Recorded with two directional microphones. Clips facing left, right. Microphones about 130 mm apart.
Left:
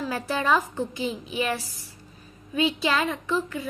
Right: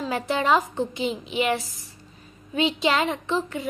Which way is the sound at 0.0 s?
20° right (ahead or behind).